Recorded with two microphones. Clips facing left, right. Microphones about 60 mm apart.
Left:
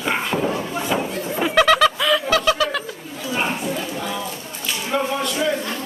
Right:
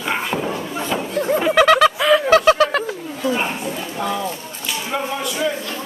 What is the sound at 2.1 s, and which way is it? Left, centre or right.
Bird, right.